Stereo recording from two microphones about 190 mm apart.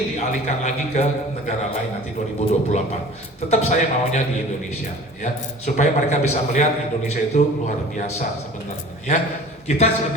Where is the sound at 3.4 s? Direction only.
35° left (ahead or behind).